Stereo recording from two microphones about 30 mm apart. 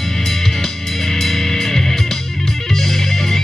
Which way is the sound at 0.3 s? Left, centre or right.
Centre.